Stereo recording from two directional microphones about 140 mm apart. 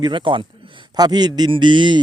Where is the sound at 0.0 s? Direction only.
35° right (ahead or behind).